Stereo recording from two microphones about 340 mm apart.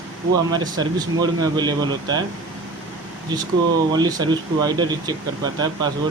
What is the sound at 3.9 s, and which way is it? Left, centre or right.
Speech, centre.